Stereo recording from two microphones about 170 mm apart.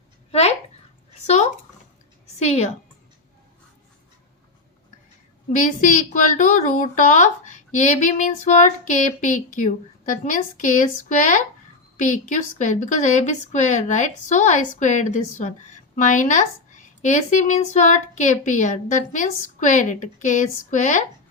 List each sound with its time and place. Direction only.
0.3 s a sound: 40° left (ahead or behind)
2.4 s a woman's voice: 40° left (ahead or behind)
5.5 s a woman's voice: 50° left (ahead or behind)